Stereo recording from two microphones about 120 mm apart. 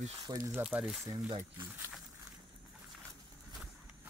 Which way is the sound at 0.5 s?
10° right (ahead or behind).